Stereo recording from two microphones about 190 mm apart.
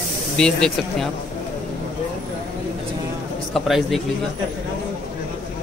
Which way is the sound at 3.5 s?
Centre (ahead or behind).